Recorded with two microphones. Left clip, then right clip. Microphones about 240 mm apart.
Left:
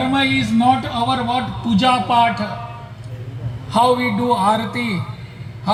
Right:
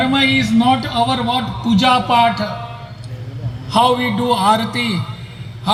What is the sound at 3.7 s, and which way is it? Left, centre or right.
A man's voice, right.